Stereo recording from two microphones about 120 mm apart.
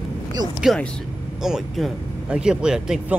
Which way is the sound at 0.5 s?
Centre (ahead or behind).